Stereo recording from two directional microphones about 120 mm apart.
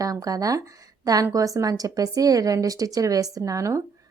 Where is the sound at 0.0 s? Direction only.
30° right (ahead or behind).